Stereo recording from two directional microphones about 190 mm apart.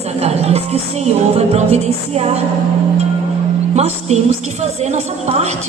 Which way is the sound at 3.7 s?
35° right (ahead or behind).